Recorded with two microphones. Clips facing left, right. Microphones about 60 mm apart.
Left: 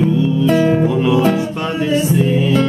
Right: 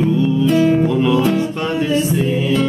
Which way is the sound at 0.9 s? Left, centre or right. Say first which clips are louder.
Left 1 dB; centre.